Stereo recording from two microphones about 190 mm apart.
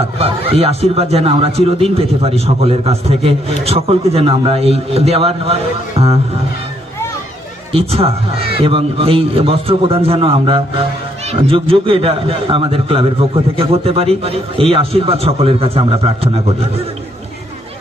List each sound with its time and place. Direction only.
0.2 s a man's voice: 30° right (ahead or behind)
7.7 s a man's voice: 30° right (ahead or behind)